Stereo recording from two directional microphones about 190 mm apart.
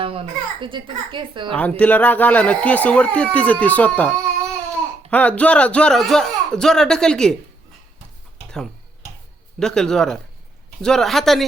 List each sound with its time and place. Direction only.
0.0 s a child's voice: 30° right (ahead or behind)
1.5 s speech: 5° left (ahead or behind)
9.6 s speech: 5° left (ahead or behind)